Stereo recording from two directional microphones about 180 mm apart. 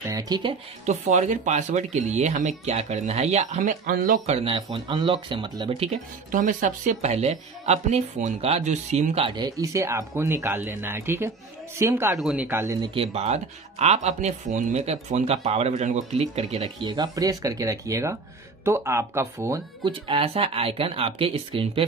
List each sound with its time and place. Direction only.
0.0 s speech: 20° right (ahead or behind)
0.8 s speech: 40° right (ahead or behind)
4.4 s speech: 30° right (ahead or behind)
5.9 s speech: 45° right (ahead or behind); by 12.9 s 15° right (ahead or behind)
12.9 s speech: 35° right (ahead or behind); by 19.9 s 20° right (ahead or behind)
19.9 s speech: 30° right (ahead or behind)